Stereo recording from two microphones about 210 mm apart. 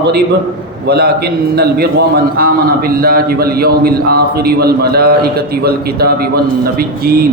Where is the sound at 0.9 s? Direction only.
50° right (ahead or behind).